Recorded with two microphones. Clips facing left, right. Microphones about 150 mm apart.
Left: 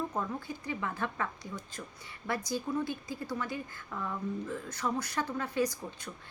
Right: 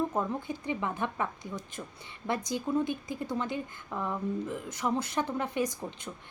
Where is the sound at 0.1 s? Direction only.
25° right (ahead or behind).